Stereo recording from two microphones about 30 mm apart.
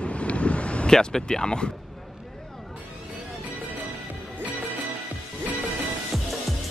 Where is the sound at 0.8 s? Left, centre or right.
Centre.